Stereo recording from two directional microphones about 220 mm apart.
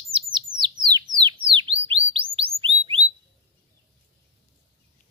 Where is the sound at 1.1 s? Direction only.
20° right (ahead or behind).